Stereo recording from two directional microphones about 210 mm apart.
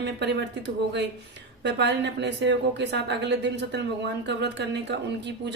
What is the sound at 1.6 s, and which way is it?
Speech, 55° right (ahead or behind).